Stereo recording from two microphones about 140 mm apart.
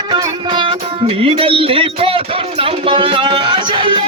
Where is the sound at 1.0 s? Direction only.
40° right (ahead or behind).